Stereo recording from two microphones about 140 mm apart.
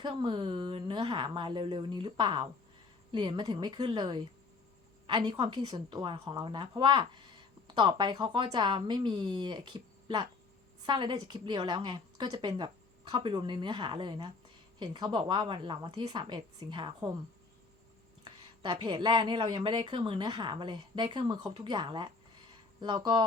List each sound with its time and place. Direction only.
0.0 s speech: 35° right (ahead or behind)
18.3 s speech: 35° right (ahead or behind)